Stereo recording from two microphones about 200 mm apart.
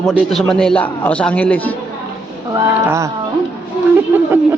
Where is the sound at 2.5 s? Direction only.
15° right (ahead or behind).